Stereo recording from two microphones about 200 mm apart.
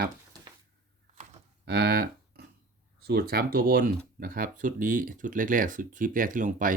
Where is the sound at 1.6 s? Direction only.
55° right (ahead or behind).